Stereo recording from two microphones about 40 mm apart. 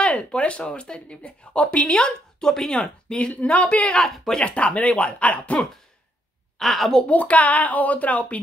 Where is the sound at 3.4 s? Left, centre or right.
Left.